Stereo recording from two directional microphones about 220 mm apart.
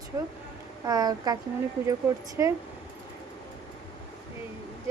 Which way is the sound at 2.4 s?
10° right (ahead or behind).